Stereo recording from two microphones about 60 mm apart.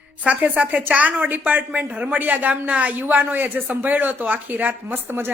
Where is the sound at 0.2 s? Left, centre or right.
Right.